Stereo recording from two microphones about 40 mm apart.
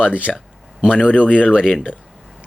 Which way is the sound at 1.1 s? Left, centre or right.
Left.